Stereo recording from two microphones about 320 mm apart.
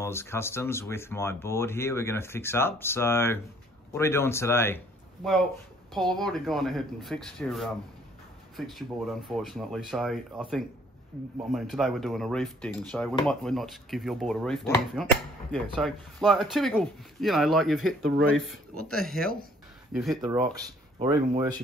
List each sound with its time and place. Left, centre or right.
0.0 s speech: centre
11.5 s speech: centre
20.2 s speech: centre